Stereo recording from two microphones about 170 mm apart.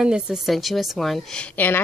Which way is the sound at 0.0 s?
5° right (ahead or behind).